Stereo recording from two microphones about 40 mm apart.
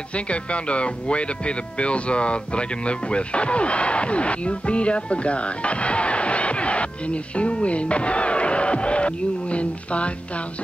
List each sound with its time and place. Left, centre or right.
0.1 s speech: left